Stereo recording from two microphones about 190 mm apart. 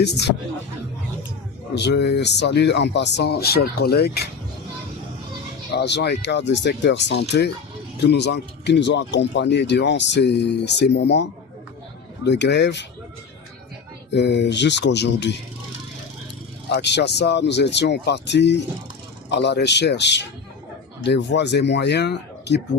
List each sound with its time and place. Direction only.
0.0 s speech: 60° left (ahead or behind)
1.7 s speech: 60° left (ahead or behind)
5.7 s speech: 60° left (ahead or behind)
14.1 s speech: 65° left (ahead or behind)
16.6 s speech: 65° left (ahead or behind)